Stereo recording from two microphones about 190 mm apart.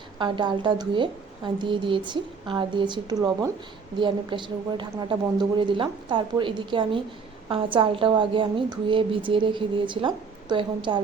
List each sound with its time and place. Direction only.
0.2 s a woman's voice: 25° right (ahead or behind)